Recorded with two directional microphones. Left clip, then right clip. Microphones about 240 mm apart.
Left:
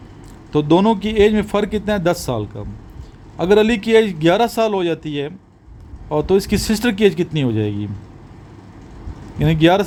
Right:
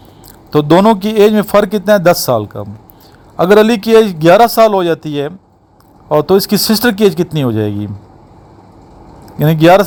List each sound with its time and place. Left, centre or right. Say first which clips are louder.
0.5 s a man's voice: right 7 dB; right
9.4 s a man's voice: right 7 dB; right